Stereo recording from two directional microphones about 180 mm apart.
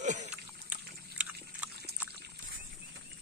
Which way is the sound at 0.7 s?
5° right (ahead or behind).